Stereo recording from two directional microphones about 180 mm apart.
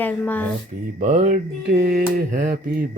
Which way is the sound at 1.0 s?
45° right (ahead or behind).